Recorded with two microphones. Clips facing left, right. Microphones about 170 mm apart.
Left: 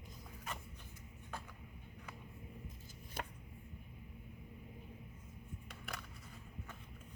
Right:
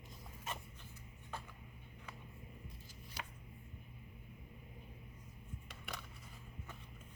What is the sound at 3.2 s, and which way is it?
Chopping, 50° left (ahead or behind).